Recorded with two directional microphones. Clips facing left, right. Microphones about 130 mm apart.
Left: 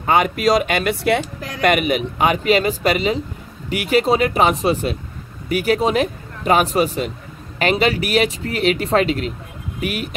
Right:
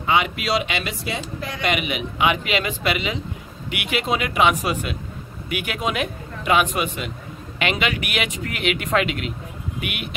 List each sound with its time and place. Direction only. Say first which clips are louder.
0.0 s speech: left 5 dB; 45° left (ahead or behind)